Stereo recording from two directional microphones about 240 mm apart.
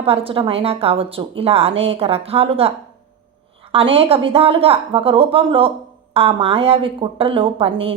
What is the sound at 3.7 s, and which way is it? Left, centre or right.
Speech, right.